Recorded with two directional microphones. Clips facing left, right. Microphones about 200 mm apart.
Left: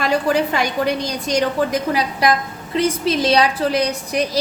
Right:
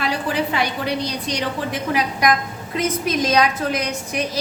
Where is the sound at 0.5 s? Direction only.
45° left (ahead or behind).